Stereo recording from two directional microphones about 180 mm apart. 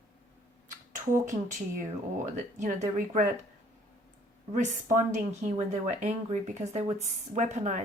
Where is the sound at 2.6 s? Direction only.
45° right (ahead or behind).